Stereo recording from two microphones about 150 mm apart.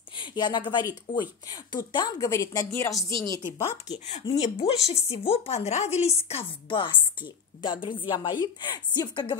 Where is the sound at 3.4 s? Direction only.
25° left (ahead or behind).